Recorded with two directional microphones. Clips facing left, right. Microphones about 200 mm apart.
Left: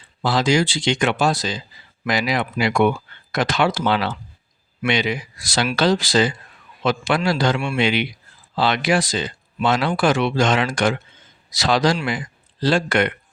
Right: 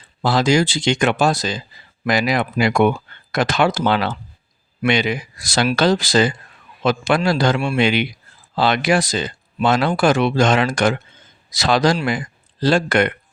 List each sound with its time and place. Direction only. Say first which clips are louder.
0.2 s speech: right 2 dB; 45° right (ahead or behind)